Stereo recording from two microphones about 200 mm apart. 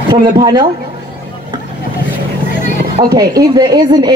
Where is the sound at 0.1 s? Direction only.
20° right (ahead or behind).